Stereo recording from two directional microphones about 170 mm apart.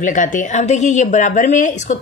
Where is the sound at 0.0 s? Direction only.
50° left (ahead or behind).